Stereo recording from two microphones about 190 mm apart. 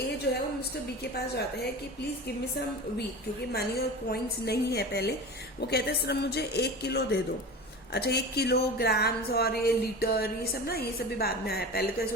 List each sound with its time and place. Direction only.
3.5 s speech: 55° left (ahead or behind)